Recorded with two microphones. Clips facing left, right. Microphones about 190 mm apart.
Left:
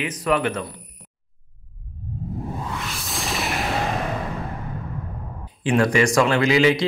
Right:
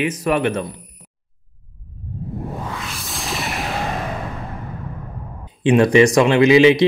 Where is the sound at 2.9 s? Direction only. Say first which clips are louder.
Even; centre (ahead or behind).